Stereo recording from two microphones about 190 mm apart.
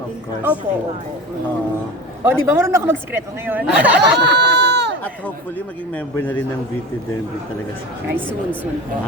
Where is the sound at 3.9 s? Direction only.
60° right (ahead or behind).